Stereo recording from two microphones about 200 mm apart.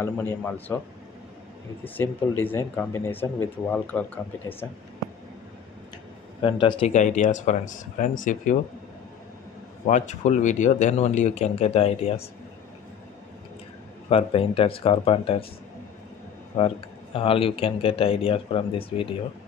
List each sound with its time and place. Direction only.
0.0 s speech: 10° left (ahead or behind)
2.0 s speech: 10° left (ahead or behind)
6.4 s speech: 25° left (ahead or behind)
6.9 s speech: 35° left (ahead or behind)
9.8 s speech: 35° left (ahead or behind)
14.0 s speech: 30° left (ahead or behind)
16.5 s speech: 25° left (ahead or behind)